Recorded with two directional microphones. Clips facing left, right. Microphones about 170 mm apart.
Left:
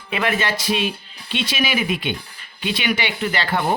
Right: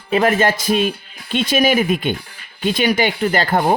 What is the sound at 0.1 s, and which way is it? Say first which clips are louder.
Speech: right 7 dB; 40° right (ahead or behind).